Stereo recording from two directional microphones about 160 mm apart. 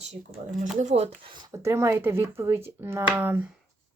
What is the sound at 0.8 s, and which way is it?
Speech, 45° right (ahead or behind).